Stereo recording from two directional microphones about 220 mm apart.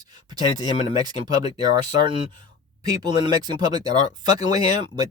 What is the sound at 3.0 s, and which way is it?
Speech, 20° right (ahead or behind).